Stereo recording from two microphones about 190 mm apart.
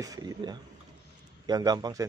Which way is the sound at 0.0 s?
20° right (ahead or behind).